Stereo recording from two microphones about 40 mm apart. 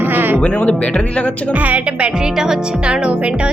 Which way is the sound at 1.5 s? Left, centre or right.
Right.